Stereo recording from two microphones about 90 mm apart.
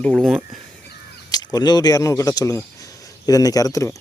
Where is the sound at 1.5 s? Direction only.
50° left (ahead or behind).